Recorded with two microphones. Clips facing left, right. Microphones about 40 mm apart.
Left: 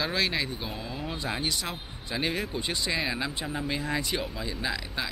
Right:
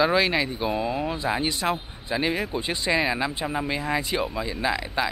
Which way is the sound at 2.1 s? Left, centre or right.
Centre.